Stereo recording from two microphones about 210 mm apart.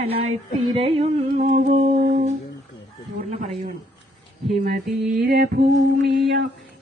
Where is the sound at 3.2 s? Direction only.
30° right (ahead or behind).